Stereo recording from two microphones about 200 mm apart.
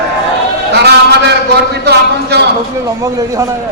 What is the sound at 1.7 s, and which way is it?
Speech, 55° right (ahead or behind).